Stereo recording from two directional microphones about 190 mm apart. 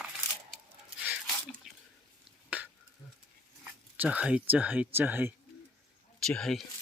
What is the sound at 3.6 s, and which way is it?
Speech, 5° right (ahead or behind).